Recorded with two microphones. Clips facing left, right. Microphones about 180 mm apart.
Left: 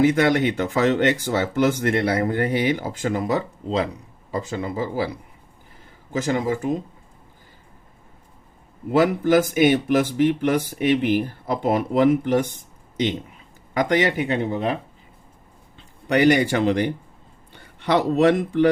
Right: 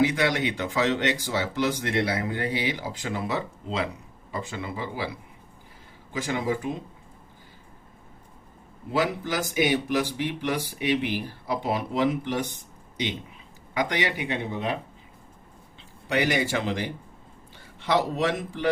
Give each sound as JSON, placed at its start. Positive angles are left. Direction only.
{"t": 0.0, "sound": "speech", "side_deg": 50}
{"t": 6.1, "sound": "speech", "side_deg": 45}
{"t": 8.9, "sound": "speech", "side_deg": 50}
{"t": 16.0, "sound": "speech", "side_deg": 60}